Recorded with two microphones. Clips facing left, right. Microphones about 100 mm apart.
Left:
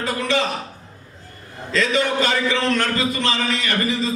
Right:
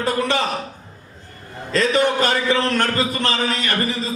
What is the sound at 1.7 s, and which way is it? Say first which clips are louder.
A man's voice: right 2 dB; 45° right (ahead or behind).